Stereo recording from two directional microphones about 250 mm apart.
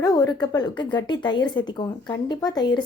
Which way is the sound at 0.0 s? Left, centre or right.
Centre.